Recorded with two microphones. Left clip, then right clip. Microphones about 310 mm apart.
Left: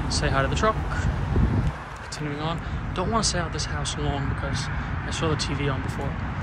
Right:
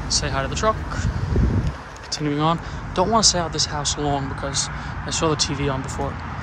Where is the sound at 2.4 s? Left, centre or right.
Centre.